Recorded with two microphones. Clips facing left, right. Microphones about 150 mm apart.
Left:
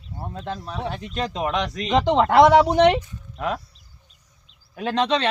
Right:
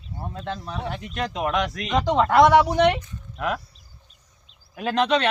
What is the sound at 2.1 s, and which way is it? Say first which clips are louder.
Speech: left 1 dB; 25° left (ahead or behind).